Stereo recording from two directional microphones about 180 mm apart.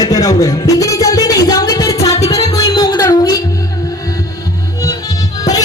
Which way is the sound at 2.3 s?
20° left (ahead or behind).